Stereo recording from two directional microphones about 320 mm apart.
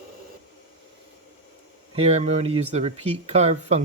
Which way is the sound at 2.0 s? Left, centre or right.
Centre.